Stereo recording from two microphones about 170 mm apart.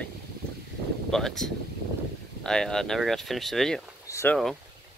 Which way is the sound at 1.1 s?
Centre (ahead or behind).